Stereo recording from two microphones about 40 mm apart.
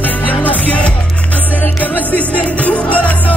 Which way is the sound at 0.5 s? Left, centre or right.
Left.